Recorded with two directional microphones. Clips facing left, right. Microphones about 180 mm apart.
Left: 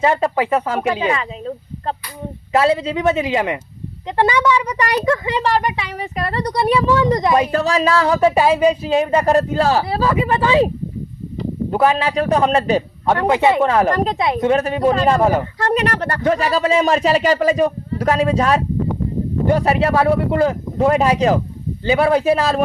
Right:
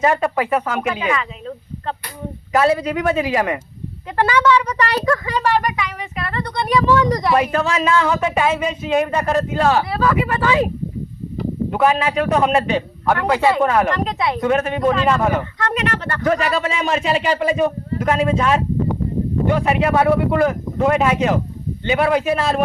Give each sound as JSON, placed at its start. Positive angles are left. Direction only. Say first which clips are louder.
{"t": 0.0, "sound": "speech", "louder": "left 1 dB", "side_deg": 30}
{"t": 11.7, "sound": "speech", "louder": "left 1 dB", "side_deg": 30}
{"t": 13.1, "sound": "speech", "louder": "left 2 dB", "side_deg": 25}
{"t": 14.2, "sound": "speech", "louder": "left 2 dB", "side_deg": 25}